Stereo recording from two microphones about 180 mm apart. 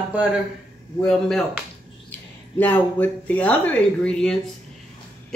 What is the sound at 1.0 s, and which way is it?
A woman's voice, centre (ahead or behind).